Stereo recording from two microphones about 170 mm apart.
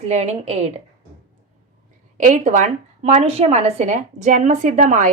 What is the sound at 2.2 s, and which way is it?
A woman's voice, 50° right (ahead or behind).